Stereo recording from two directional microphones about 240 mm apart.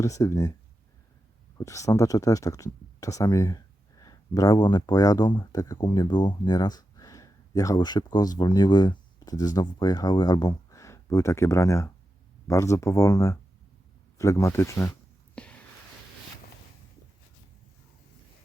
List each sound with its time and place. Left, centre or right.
0.0 s speech: centre
1.5 s speech: centre
15.4 s a sound: centre